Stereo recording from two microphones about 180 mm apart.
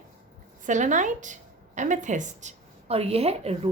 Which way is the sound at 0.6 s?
45° right (ahead or behind).